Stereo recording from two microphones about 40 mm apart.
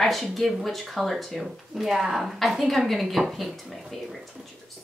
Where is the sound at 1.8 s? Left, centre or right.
Centre.